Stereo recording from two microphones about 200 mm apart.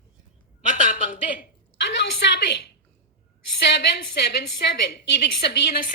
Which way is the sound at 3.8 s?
55° left (ahead or behind).